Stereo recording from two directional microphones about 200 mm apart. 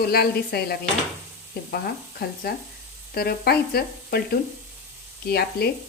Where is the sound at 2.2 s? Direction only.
50° left (ahead or behind).